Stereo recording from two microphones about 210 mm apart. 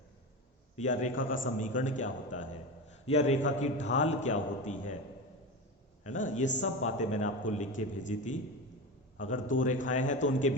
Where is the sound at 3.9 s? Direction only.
35° left (ahead or behind).